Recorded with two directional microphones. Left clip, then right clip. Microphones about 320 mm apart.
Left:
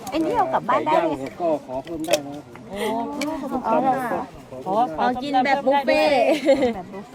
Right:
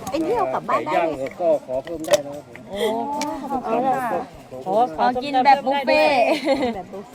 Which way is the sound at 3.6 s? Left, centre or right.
Left.